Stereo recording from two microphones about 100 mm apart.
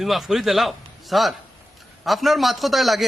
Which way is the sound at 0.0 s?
Centre (ahead or behind).